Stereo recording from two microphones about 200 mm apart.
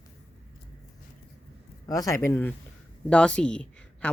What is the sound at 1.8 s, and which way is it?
Speech, 15° left (ahead or behind).